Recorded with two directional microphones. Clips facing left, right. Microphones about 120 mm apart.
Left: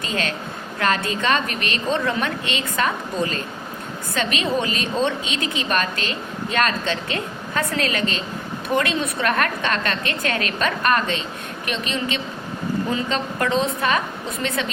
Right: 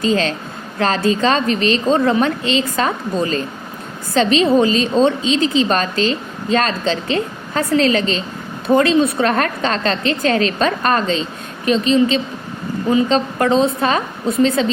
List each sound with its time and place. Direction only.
0.0 s a woman's voice: 30° right (ahead or behind)